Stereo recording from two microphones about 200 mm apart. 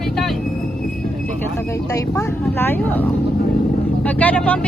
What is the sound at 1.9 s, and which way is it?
Speech, 15° left (ahead or behind).